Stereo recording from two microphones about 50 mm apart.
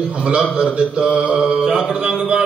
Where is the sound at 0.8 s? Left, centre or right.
Centre.